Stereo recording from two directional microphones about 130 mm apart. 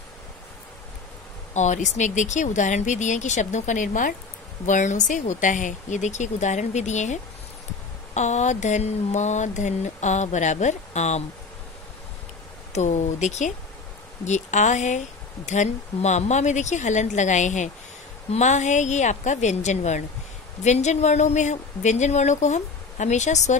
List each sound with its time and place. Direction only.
1.5 s speech: 65° left (ahead or behind); by 4.1 s 90° left
4.6 s speech: 70° left (ahead or behind)
12.7 s speech: 65° left (ahead or behind)